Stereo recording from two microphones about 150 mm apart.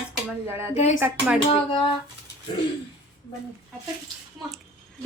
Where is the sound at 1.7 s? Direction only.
35° left (ahead or behind).